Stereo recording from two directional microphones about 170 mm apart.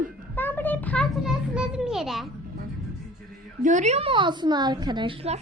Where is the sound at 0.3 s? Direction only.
10° left (ahead or behind).